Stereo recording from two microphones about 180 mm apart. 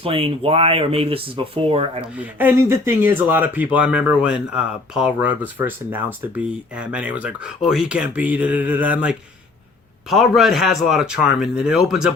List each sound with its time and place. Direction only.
0.0 s speech: 30° right (ahead or behind)
2.1 s a man's voice: 10° right (ahead or behind)